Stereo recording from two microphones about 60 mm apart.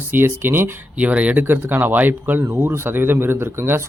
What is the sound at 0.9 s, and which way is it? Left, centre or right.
Speech, right.